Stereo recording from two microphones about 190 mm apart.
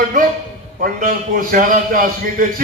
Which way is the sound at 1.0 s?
45° right (ahead or behind).